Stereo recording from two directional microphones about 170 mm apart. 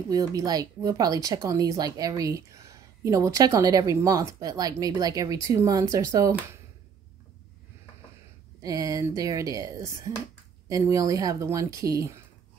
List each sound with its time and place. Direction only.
0.1 s speech: 20° right (ahead or behind)
8.6 s speech: 20° right (ahead or behind)